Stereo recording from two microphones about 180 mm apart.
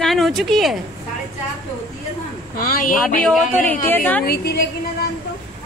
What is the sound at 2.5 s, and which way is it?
Speech, 55° left (ahead or behind).